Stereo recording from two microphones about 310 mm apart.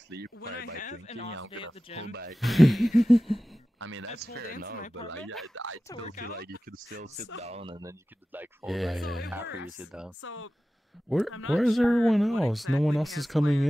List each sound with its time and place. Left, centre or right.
0.7 s speech: left
2.4 s speech: centre
3.8 s speech: right
5.2 s speech: centre
5.5 s speech: right
7.4 s speech: centre
10.2 s speech: left
11.1 s speech: centre